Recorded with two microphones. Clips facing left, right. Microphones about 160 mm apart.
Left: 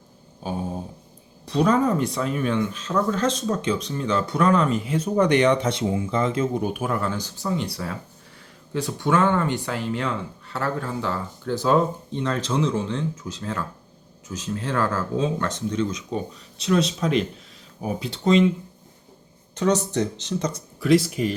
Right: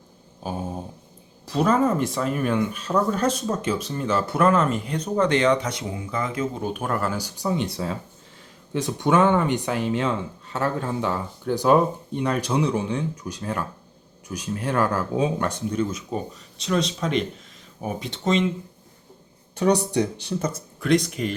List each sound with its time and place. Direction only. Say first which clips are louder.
1.5 s speech: even; centre (ahead or behind); by 6.4 s 25° left (ahead or behind)
6.5 s speech: left 2 dB; 10° left (ahead or behind)
19.5 s speech: right 1 dB; 15° right (ahead or behind)
20.8 s speech: left 2 dB; 5° left (ahead or behind)